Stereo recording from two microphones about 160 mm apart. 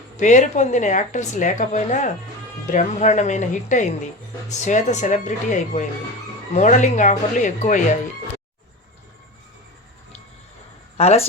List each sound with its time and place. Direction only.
0.2 s speech: 50° left (ahead or behind)
10.9 s speech: 40° left (ahead or behind)